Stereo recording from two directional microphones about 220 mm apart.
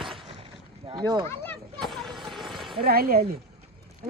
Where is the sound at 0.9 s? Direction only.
20° right (ahead or behind).